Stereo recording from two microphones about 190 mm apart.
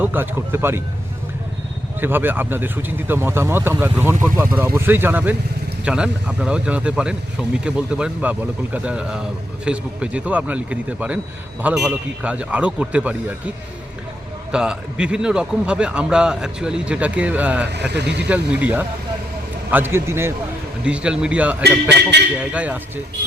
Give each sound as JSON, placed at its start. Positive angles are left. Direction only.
{"t": 0.0, "sound": "speech", "side_deg": -10}
{"t": 2.0, "sound": "speech", "side_deg": -10}
{"t": 14.5, "sound": "speech", "side_deg": -5}
{"t": 17.9, "sound": "speech", "side_deg": -60}
{"t": 18.3, "sound": "speech", "side_deg": -10}
{"t": 21.6, "sound": "speech", "side_deg": -60}
{"t": 22.4, "sound": "speech", "side_deg": -5}